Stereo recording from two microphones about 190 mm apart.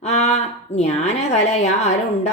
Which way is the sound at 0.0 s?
35° left (ahead or behind).